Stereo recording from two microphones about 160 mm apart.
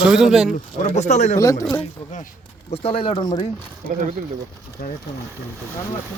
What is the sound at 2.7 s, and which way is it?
Speech, 35° left (ahead or behind).